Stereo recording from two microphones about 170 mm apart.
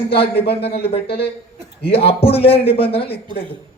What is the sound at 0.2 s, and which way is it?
Speech, 35° left (ahead or behind).